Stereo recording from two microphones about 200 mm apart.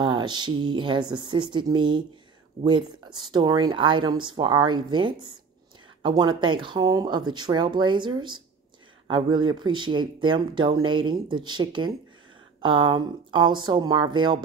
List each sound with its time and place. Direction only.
0.0 s speech: 20° right (ahead or behind)